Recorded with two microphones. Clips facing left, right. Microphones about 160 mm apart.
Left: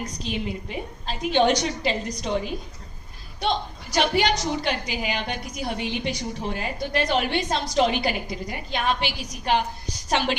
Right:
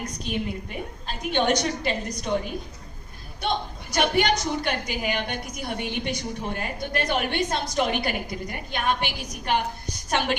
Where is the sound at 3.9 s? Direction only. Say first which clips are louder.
Even; 50° right (ahead or behind).